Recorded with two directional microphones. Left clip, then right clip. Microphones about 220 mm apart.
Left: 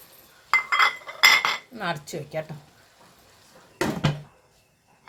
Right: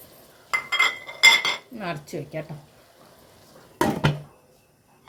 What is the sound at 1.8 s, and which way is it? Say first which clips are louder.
Speech: left 2 dB; 50° left (ahead or behind).